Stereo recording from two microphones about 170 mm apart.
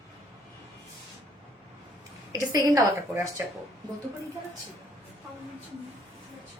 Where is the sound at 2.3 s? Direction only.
20° right (ahead or behind).